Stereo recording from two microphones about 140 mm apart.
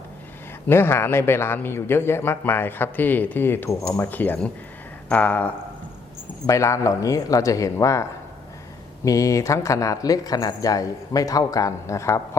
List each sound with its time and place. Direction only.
0.7 s a man's voice: 15° left (ahead or behind)
6.5 s speech: 20° left (ahead or behind)
9.0 s speech: 25° left (ahead or behind)